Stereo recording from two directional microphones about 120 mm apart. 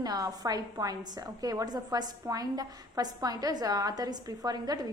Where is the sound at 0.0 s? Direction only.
30° right (ahead or behind).